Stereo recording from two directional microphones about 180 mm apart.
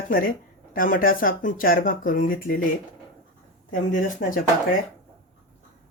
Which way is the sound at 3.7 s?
50° left (ahead or behind).